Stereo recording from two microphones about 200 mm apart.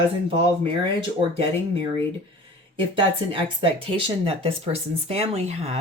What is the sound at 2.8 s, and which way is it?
Speech, 25° right (ahead or behind).